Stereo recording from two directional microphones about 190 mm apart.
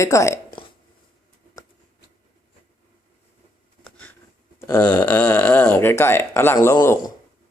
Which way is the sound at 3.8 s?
5° left (ahead or behind).